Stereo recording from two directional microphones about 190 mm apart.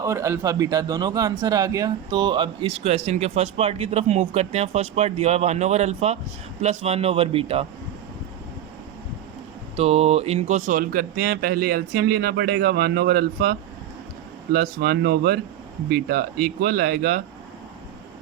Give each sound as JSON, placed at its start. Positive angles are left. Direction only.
{"t": 0.0, "sound": "a man's voice", "side_deg": -15}
{"t": 9.7, "sound": "speech", "side_deg": -35}